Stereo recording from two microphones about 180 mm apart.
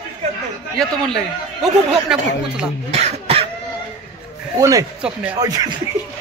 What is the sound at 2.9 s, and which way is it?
Cough, 35° right (ahead or behind).